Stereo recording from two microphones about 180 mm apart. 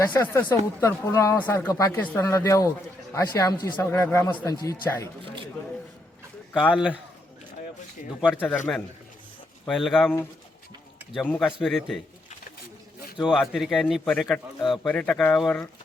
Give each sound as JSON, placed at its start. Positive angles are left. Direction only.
{"t": 0.0, "sound": "speech", "side_deg": 10}
{"t": 4.3, "sound": "a man's voice", "side_deg": 25}
{"t": 8.2, "sound": "a man's voice", "side_deg": 10}
{"t": 11.3, "sound": "a man's voice", "side_deg": 5}
{"t": 13.2, "sound": "a man's voice", "side_deg": 0}